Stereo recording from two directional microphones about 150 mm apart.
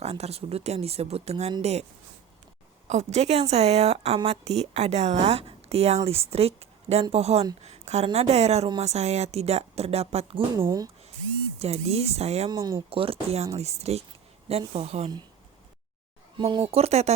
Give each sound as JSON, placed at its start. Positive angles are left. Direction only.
{"t": 0.0, "sound": "a woman's voice", "side_deg": -45}
{"t": 10.6, "sound": "speech", "side_deg": -25}
{"t": 11.6, "sound": "a woman's voice", "side_deg": -45}
{"t": 12.5, "sound": "speech", "side_deg": -25}
{"t": 12.9, "sound": "a woman's voice", "side_deg": -40}
{"t": 16.4, "sound": "a woman's voice", "side_deg": -35}